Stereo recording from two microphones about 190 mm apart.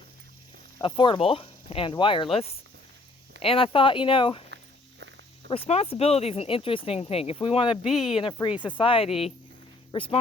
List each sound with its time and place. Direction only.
0.8 s speech: 25° left (ahead or behind)
4.5 s walk: 65° right (ahead or behind)
5.5 s speech: 30° left (ahead or behind)
7.9 s speech: centre (ahead or behind)
8.2 s speech: 25° left (ahead or behind)